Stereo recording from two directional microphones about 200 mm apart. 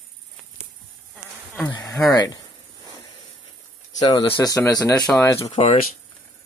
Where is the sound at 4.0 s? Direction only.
20° left (ahead or behind).